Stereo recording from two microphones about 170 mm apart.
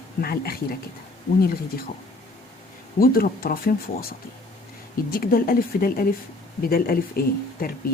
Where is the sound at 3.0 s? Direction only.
60° left (ahead or behind).